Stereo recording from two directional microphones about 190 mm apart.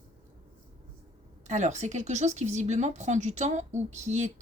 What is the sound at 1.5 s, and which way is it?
Speech, 35° right (ahead or behind).